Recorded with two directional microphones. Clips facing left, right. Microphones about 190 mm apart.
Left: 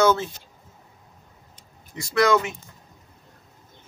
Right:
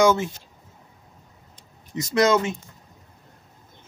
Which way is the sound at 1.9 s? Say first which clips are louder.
Right 1 dB; 20° right (ahead or behind).